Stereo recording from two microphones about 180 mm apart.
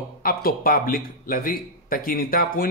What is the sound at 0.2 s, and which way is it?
Speech, 55° left (ahead or behind).